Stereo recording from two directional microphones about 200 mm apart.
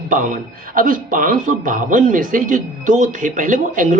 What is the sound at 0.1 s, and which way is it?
Speech, 45° right (ahead or behind).